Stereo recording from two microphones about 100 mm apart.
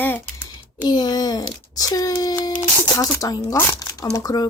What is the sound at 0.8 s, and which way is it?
A child's voice, 45° left (ahead or behind).